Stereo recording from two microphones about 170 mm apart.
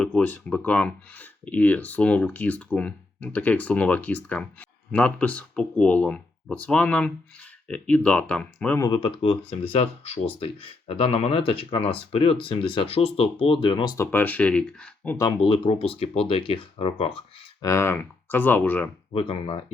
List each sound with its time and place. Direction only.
0.0 s speech: 10° left (ahead or behind)
8.8 s speech: 30° left (ahead or behind); by 15.3 s 10° left (ahead or behind)
15.3 s speech: 30° left (ahead or behind)
17.6 s speech: 15° left (ahead or behind)
19.1 s speech: 35° left (ahead or behind)